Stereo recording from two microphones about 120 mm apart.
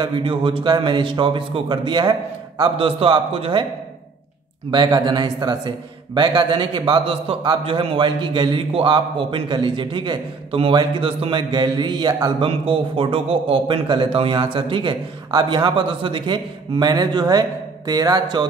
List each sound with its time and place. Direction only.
0.0 s a man's voice: 45° right (ahead or behind)
2.8 s a man's voice: 50° right (ahead or behind)
4.6 s a man's voice: 35° right (ahead or behind)
12.4 s a man's voice: 45° right (ahead or behind)